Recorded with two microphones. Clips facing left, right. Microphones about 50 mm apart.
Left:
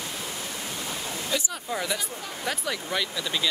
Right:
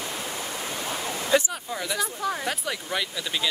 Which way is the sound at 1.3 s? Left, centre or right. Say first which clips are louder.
Right 8 dB; right.